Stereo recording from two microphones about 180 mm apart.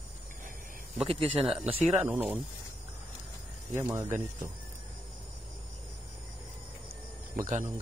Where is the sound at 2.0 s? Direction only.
10° right (ahead or behind).